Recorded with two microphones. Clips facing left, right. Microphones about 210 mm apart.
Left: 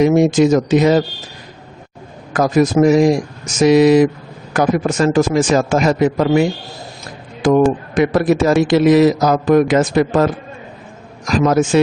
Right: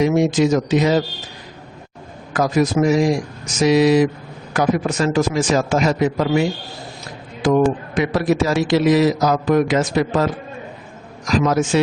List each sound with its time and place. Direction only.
0.0 s a man's voice: 50° left (ahead or behind)
2.3 s a man's voice: 50° left (ahead or behind)
7.4 s a man's voice: 50° left (ahead or behind)
11.3 s a man's voice: 50° left (ahead or behind)